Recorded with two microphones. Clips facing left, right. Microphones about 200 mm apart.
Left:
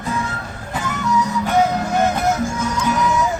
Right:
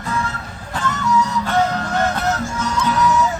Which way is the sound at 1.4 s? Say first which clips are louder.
Left 2 dB; 10° left (ahead or behind).